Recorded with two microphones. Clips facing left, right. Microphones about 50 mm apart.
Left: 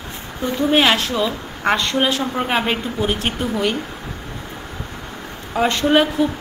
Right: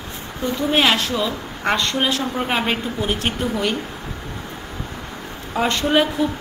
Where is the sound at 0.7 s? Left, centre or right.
Centre.